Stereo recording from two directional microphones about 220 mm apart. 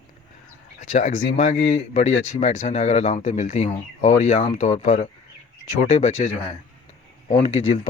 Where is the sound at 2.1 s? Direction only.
65° left (ahead or behind).